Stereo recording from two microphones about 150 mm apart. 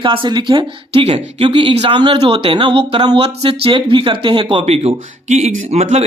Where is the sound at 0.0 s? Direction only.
35° right (ahead or behind).